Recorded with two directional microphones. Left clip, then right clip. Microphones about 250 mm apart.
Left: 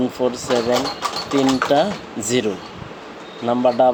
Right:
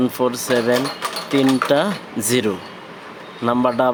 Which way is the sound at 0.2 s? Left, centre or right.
Right.